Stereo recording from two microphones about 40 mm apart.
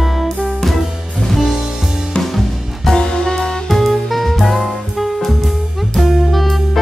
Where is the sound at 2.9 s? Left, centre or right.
Centre.